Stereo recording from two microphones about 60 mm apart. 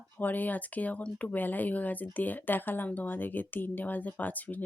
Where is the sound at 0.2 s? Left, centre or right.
Left.